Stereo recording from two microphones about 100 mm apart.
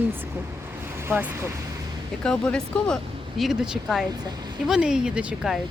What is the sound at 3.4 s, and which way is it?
A woman's voice, 5° right (ahead or behind).